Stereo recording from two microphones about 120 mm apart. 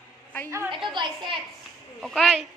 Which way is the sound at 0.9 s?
45° right (ahead or behind).